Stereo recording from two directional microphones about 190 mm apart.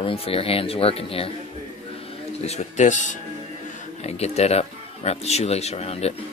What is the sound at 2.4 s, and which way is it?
Speech, 35° left (ahead or behind).